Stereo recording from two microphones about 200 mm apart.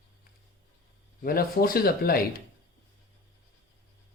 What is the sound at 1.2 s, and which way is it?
Speech, 45° left (ahead or behind).